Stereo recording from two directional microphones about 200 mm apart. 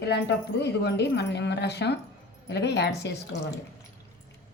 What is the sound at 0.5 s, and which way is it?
Speech, 60° left (ahead or behind).